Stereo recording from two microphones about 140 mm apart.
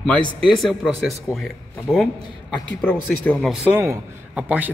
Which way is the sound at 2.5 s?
10° left (ahead or behind).